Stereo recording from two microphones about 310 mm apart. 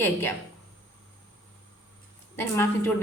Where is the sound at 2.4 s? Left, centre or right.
Centre.